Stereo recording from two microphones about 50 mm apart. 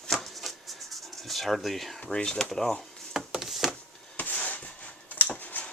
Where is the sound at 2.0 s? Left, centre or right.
Centre.